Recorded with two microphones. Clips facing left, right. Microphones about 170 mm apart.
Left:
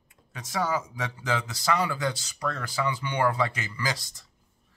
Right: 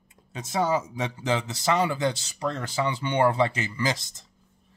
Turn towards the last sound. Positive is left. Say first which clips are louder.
# right 4 dB
turn(degrees=-25)  # may be behind; listen again after turning